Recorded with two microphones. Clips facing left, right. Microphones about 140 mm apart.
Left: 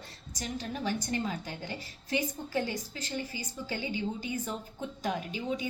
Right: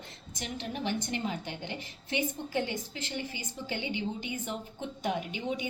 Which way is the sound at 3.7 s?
20° right (ahead or behind).